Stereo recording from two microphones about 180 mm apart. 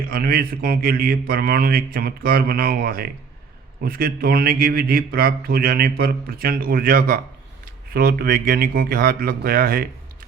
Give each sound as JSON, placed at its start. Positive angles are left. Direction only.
{"t": 0.1, "sound": "a man's voice", "side_deg": -55}